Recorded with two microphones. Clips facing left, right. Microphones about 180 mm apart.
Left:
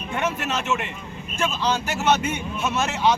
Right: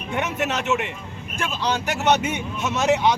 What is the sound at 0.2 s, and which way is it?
Speech, 15° right (ahead or behind).